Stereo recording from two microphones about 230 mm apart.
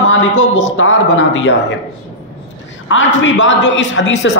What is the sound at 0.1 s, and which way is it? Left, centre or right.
Speech, left.